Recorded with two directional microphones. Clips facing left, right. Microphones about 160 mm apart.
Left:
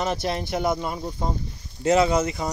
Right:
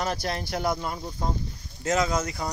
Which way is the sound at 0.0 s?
20° left (ahead or behind).